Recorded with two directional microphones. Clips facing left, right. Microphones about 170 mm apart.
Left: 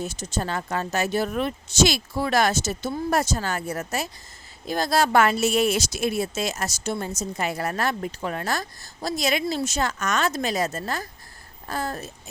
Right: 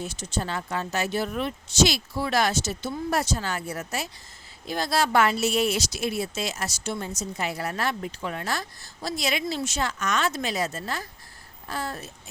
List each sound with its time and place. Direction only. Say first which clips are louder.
0.0 s speech: left 2 dB; 45° left (ahead or behind)